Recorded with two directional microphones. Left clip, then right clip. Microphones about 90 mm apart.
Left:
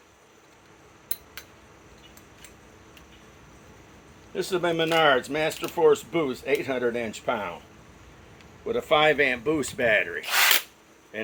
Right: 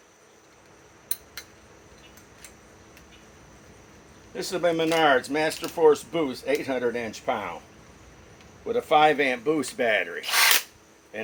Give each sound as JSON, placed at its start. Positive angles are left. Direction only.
{"t": 4.4, "sound": "speech", "side_deg": 40}
{"t": 8.6, "sound": "speech", "side_deg": 40}
{"t": 11.1, "sound": "a sound", "side_deg": 45}